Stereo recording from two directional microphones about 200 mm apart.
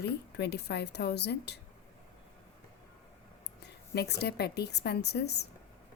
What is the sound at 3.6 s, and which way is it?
A woman's voice, 55° left (ahead or behind).